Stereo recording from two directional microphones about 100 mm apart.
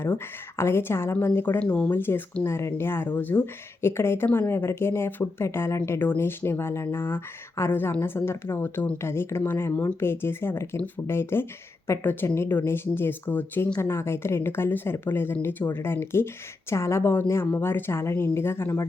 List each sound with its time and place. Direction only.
0.5 s a woman's voice: 25° left (ahead or behind)